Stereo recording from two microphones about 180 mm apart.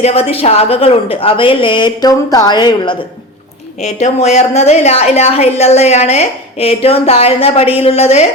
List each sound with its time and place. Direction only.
0.0 s a woman's voice: 35° left (ahead or behind)
3.8 s a woman's voice: 35° left (ahead or behind)